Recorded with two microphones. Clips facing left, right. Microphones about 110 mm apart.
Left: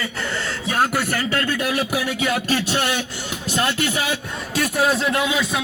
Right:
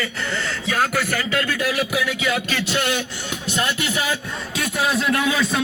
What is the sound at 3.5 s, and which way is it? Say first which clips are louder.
Music: left 3 dB; 40° left (ahead or behind).